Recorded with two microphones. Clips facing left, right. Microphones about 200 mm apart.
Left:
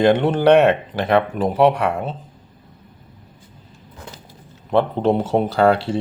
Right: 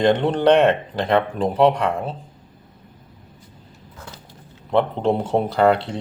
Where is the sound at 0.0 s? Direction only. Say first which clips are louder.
Left 2 dB; 5° left (ahead or behind).